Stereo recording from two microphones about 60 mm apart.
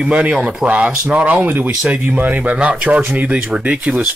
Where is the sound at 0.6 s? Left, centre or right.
Right.